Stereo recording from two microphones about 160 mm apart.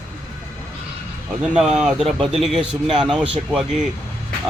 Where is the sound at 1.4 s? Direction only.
5° right (ahead or behind).